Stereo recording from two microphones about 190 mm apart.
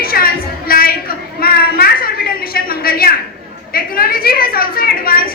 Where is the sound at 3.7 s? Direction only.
50° left (ahead or behind).